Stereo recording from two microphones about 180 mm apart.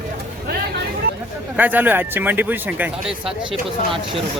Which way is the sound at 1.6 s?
10° right (ahead or behind).